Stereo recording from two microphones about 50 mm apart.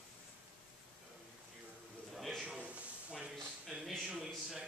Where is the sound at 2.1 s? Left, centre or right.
Centre.